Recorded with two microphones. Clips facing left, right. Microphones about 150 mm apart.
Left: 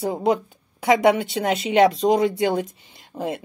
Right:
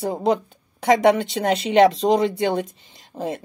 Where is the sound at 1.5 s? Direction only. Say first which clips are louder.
Right 2 dB; centre (ahead or behind).